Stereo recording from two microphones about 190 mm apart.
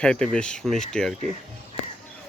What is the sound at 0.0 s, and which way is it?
Speech, 5° left (ahead or behind).